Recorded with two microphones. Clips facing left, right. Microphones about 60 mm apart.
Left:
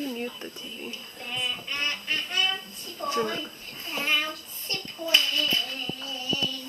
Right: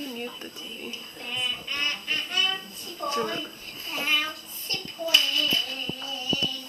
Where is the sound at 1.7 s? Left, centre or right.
Left.